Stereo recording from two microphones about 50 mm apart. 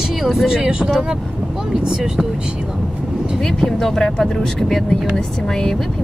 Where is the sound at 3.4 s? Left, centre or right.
Centre.